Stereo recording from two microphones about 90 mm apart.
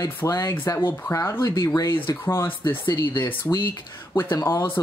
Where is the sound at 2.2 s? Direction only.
25° left (ahead or behind).